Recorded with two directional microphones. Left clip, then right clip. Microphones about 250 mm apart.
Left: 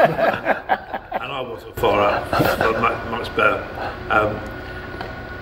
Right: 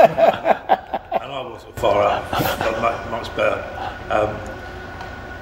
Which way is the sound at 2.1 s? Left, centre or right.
Left.